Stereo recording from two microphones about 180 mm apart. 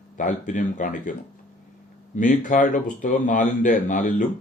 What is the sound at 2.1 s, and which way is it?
A man's voice, 45° left (ahead or behind).